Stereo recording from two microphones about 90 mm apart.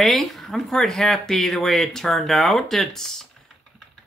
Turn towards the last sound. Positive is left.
turn(degrees=5)  # may be behind; listen again after turning